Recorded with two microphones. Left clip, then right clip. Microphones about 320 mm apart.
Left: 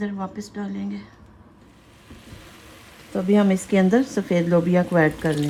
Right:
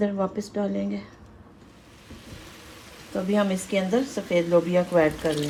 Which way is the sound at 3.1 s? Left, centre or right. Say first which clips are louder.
Left 4 dB; left.